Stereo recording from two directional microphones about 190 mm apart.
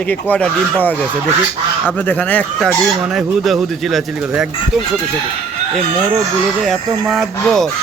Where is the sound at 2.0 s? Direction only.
10° left (ahead or behind).